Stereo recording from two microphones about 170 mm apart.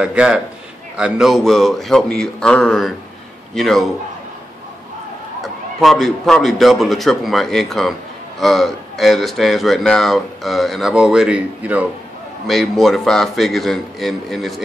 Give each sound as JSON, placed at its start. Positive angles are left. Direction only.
{"t": 0.0, "sound": "a man's voice", "side_deg": -5}
{"t": 5.8, "sound": "speech", "side_deg": 0}